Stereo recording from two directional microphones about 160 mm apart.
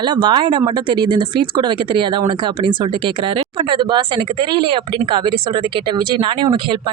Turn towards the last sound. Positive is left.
turn(degrees=-30)  # may be behind; listen again after turning